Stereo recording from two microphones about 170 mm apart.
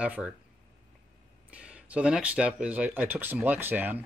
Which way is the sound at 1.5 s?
5° right (ahead or behind).